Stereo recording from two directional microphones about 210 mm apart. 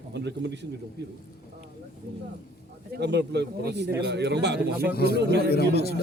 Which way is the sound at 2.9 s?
55° right (ahead or behind).